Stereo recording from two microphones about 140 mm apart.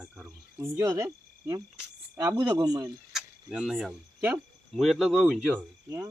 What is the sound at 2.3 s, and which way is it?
Speech, 30° right (ahead or behind).